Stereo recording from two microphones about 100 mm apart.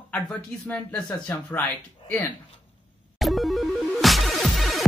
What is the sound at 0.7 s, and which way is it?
Speech, 15° left (ahead or behind).